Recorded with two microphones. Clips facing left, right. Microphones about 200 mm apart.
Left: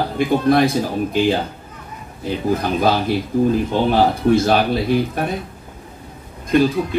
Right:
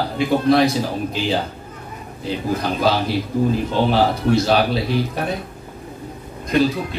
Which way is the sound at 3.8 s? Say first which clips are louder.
Left 3 dB; 50° left (ahead or behind).